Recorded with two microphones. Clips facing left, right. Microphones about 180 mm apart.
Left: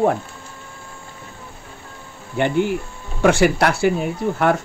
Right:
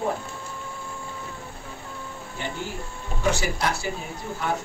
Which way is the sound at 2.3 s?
65° left (ahead or behind).